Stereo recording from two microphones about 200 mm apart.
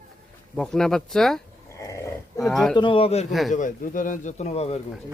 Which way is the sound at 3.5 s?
40° left (ahead or behind).